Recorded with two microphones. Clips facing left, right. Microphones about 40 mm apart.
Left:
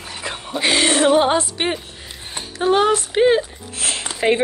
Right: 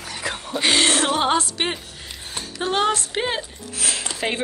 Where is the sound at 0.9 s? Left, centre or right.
Centre.